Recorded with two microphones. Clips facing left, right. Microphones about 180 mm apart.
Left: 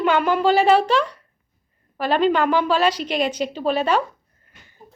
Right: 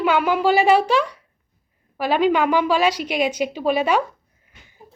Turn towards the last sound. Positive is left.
turn(degrees=-10)  # may be behind; listen again after turning